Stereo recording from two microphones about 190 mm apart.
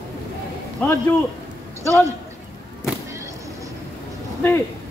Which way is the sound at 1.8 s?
15° right (ahead or behind).